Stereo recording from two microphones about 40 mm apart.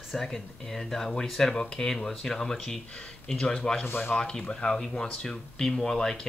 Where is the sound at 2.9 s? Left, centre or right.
Left.